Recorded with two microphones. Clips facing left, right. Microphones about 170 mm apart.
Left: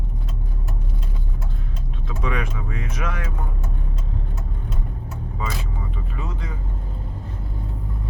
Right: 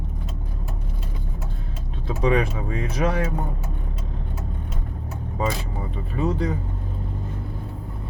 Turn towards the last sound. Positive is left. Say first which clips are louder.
# right 10 dB
turn(degrees=-35)  # may be behind; listen again after turning